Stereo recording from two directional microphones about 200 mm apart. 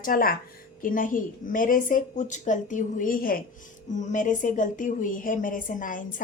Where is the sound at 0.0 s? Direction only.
45° left (ahead or behind).